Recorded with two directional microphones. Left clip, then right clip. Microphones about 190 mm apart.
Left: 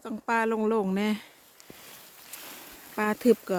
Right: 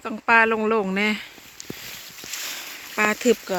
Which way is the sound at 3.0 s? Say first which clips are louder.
Right 4 dB; 5° left (ahead or behind).